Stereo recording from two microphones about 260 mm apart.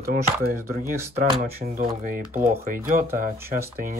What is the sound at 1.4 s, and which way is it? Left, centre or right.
Speech, right.